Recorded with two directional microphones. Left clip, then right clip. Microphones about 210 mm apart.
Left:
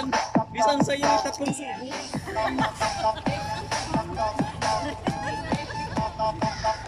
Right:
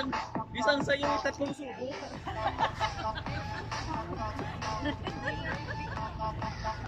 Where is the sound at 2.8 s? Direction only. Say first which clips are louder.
Left 9 dB; 40° left (ahead or behind).